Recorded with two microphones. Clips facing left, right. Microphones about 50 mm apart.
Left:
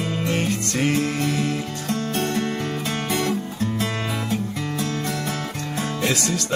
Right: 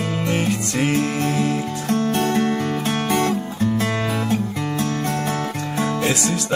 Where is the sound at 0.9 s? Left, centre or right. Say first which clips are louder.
Right 2 dB; right.